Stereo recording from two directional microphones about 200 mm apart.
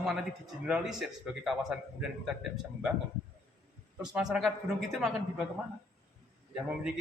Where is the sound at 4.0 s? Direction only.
5° right (ahead or behind).